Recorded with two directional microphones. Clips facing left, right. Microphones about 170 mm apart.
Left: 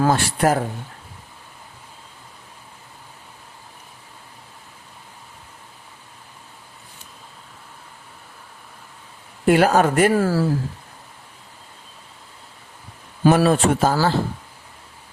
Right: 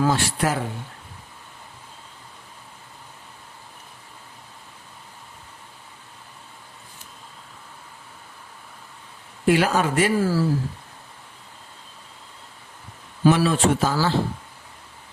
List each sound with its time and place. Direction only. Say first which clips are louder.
0.0 s speech: left 3 dB; 50° left (ahead or behind)
9.5 s speech: left 4 dB; 45° left (ahead or behind)
13.2 s speech: left 2 dB; 50° left (ahead or behind)